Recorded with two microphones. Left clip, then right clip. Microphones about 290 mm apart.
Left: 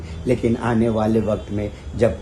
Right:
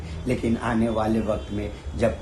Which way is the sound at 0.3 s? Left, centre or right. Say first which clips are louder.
Left 5 dB; left.